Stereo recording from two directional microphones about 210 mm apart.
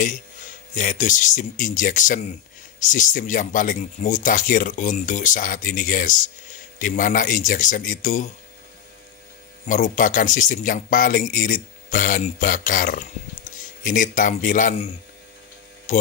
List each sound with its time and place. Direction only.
0.7 s speech: 40° left (ahead or behind)
9.7 s speech: 40° left (ahead or behind)
15.9 s speech: 35° left (ahead or behind)